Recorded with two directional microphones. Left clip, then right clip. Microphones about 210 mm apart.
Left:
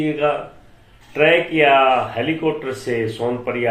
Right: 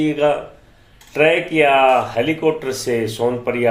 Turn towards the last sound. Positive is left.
turn(degrees=-45)  # may be behind; listen again after turning